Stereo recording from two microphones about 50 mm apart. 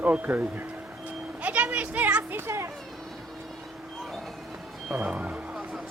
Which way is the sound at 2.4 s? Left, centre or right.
Right.